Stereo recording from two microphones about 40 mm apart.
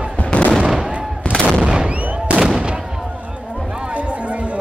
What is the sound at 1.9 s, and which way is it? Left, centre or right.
Fireworks, right.